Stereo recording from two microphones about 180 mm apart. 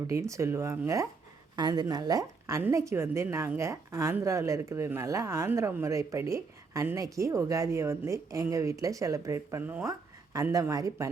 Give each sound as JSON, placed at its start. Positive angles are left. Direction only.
{"t": 0.1, "sound": "a woman's voice", "side_deg": -15}